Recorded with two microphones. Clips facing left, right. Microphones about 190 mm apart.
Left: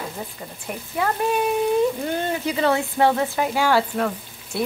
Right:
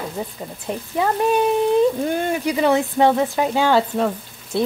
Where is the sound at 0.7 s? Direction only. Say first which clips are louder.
Right 3 dB; 20° right (ahead or behind).